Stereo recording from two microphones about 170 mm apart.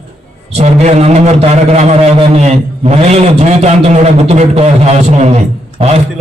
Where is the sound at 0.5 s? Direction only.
40° right (ahead or behind).